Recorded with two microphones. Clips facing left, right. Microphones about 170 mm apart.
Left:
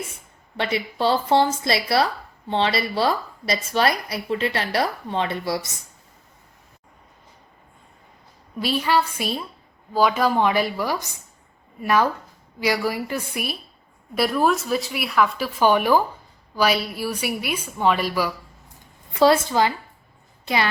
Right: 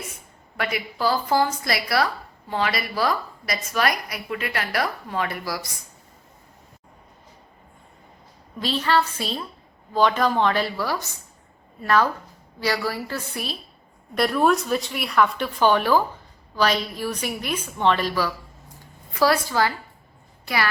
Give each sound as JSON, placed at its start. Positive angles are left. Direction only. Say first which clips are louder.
{"t": 0.5, "sound": "a woman's voice", "louder": "left 3 dB", "side_deg": 25}
{"t": 8.5, "sound": "a woman's voice", "louder": "left 1 dB", "side_deg": 10}
{"t": 14.2, "sound": "a woman's voice", "louder": "even", "side_deg": 0}
{"t": 19.1, "sound": "a woman's voice", "louder": "left 4 dB", "side_deg": 25}